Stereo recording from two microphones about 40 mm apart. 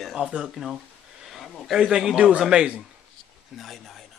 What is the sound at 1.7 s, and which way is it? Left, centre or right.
Speech, centre.